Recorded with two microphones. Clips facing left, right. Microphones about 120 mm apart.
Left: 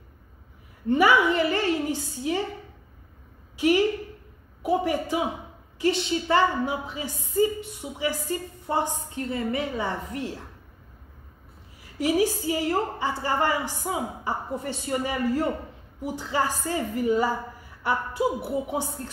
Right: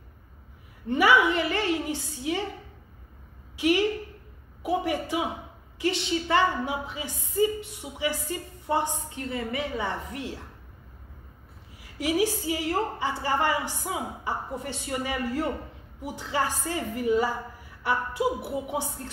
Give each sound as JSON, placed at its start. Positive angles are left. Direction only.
{"t": 0.8, "sound": "a woman's voice", "side_deg": 40}
{"t": 3.5, "sound": "a woman's voice", "side_deg": 40}
{"t": 12.0, "sound": "a woman's voice", "side_deg": 40}